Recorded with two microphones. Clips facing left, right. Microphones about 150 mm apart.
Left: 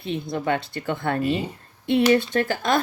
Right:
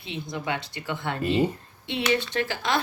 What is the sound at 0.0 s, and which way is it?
Speech, 50° left (ahead or behind).